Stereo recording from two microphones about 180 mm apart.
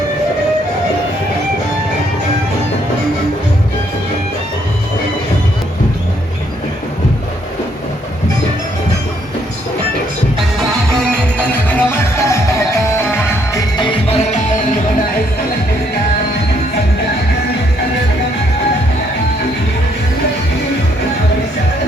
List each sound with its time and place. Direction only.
10.6 s music: 5° left (ahead or behind)
13.7 s music: 25° left (ahead or behind)